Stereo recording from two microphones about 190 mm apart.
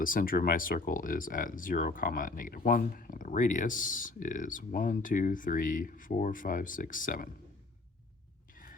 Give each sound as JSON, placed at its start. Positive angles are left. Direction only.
{"t": 0.0, "sound": "speech", "side_deg": 45}